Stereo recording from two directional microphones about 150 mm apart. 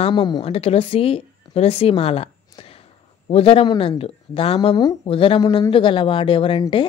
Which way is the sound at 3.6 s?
30° left (ahead or behind).